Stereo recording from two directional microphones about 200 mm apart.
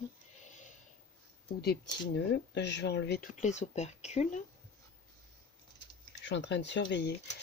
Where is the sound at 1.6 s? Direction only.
60° left (ahead or behind).